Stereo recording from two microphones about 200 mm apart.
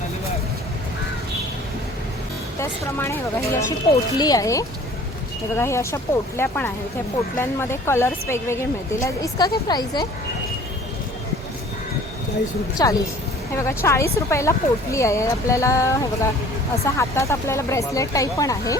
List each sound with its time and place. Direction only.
2.6 s a woman's voice: 15° left (ahead or behind)
12.8 s speech: 15° left (ahead or behind)